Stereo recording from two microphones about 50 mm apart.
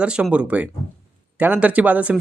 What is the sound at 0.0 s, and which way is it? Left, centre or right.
Speech, right.